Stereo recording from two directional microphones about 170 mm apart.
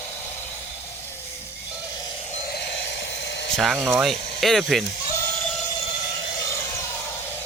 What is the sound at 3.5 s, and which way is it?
Speech, centre (ahead or behind).